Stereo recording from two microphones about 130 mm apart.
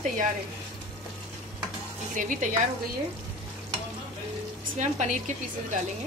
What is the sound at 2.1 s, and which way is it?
Speech, 80° right.